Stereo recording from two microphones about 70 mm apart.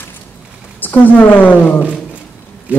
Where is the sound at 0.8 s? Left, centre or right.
Left.